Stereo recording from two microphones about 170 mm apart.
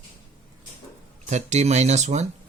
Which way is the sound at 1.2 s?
40° right (ahead or behind).